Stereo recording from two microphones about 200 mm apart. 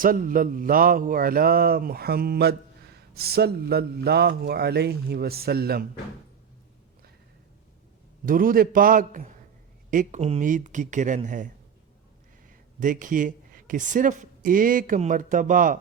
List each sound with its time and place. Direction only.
0.0 s mantra: 45° right (ahead or behind)
8.2 s mantra: 45° right (ahead or behind)
9.9 s speech: 40° right (ahead or behind)
12.8 s speech: 40° right (ahead or behind)